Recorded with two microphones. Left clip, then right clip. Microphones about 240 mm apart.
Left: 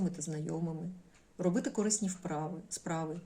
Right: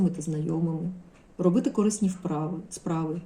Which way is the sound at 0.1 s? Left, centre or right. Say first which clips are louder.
Right 8 dB; centre.